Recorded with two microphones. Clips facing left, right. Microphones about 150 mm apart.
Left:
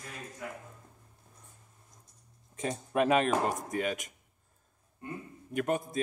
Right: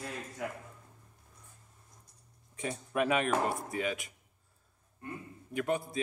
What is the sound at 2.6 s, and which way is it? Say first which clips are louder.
Speech: left 3 dB; 40° left (ahead or behind).